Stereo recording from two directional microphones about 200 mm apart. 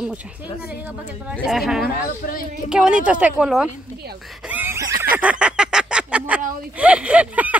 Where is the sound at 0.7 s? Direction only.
5° right (ahead or behind).